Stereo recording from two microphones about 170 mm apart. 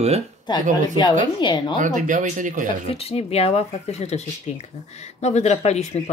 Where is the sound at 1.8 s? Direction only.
50° right (ahead or behind).